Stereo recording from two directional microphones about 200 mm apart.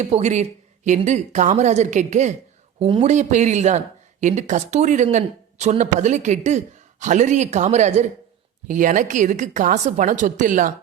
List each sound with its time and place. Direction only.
0.0 s speech: 35° right (ahead or behind)